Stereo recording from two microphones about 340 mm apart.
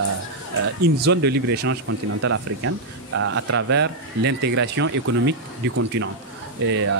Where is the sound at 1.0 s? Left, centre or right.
Right.